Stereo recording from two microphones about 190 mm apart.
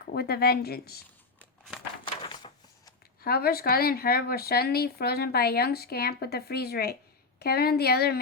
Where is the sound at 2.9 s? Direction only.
55° left (ahead or behind).